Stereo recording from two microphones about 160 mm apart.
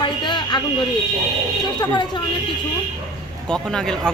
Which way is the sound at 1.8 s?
30° left (ahead or behind).